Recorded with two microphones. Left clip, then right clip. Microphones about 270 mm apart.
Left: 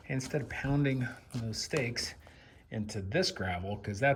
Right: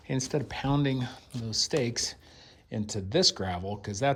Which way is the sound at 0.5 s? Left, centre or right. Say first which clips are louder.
Right 3 dB; right.